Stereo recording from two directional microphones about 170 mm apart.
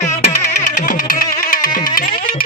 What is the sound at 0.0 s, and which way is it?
Music, 45° left (ahead or behind).